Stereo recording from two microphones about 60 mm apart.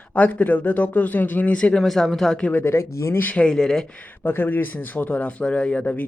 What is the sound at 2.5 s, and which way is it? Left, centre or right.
Speech, left.